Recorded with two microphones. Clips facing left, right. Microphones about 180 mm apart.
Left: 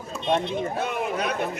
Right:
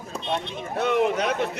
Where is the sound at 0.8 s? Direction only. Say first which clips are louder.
Right 5 dB; 80° right.